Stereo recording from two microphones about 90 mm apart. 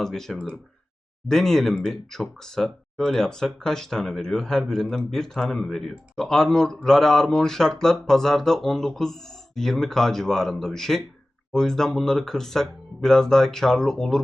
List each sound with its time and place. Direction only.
0.0 s speech: 5° left (ahead or behind)